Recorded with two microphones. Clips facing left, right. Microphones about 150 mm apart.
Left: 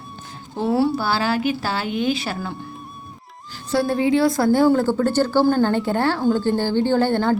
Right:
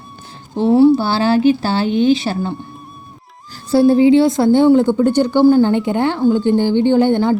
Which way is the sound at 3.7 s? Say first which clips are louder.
Right 9 dB; 30° right (ahead or behind).